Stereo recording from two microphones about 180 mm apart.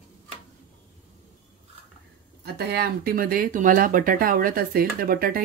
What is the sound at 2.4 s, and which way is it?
Speech, 65° right (ahead or behind).